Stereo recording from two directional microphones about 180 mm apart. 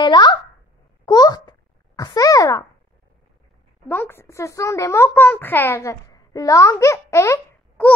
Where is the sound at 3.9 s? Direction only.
10° left (ahead or behind).